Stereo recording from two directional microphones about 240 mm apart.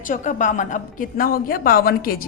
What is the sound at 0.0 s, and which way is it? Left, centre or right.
A woman's voice, left.